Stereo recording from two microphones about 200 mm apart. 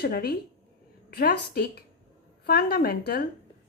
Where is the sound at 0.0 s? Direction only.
50° left (ahead or behind).